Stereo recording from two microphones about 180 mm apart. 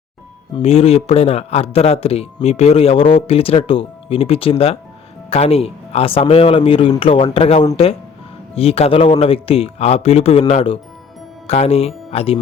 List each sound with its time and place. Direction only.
0.5 s speech: 35° left (ahead or behind)